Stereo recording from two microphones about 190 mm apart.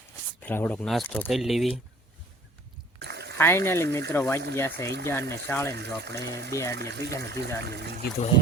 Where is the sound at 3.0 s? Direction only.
60° right (ahead or behind).